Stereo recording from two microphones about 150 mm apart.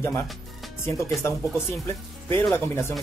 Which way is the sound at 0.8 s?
20° left (ahead or behind).